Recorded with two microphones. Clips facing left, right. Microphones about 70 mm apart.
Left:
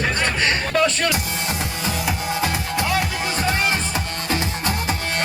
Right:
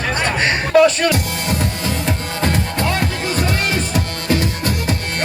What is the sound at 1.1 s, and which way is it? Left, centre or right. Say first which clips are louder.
Music: right 4 dB; centre.